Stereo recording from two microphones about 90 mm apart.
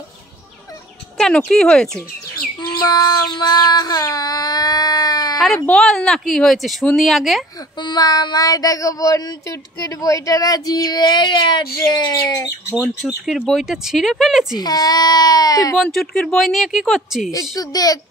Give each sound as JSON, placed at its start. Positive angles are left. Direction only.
{"t": 1.1, "sound": "speech", "side_deg": 5}
{"t": 2.3, "sound": "child singing", "side_deg": 45}
{"t": 5.7, "sound": "speech", "side_deg": 5}
{"t": 7.8, "sound": "child singing", "side_deg": 50}
{"t": 13.0, "sound": "speech", "side_deg": 0}
{"t": 14.6, "sound": "child singing", "side_deg": 45}
{"t": 15.8, "sound": "speech", "side_deg": 5}
{"t": 17.3, "sound": "child singing", "side_deg": 40}